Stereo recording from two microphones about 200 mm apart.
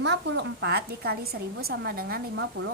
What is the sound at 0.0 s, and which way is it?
A woman's voice, 60° right (ahead or behind).